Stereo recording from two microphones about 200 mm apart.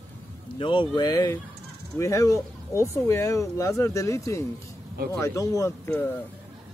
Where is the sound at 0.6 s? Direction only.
25° left (ahead or behind).